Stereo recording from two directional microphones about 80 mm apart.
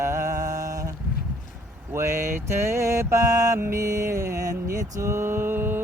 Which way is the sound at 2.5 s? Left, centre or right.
Right.